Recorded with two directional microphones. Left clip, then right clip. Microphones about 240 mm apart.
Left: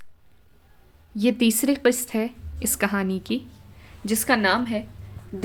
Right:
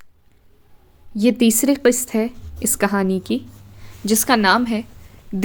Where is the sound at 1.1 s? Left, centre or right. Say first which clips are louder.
Right 5 dB; centre.